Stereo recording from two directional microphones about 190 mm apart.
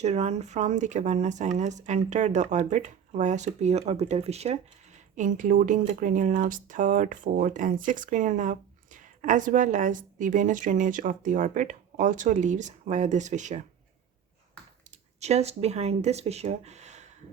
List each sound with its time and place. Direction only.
0.0 s speech: 35° right (ahead or behind)
14.8 s speech: 35° right (ahead or behind)